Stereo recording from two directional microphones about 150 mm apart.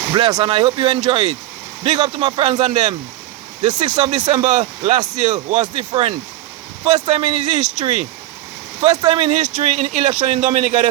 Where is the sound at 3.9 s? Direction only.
45° right (ahead or behind).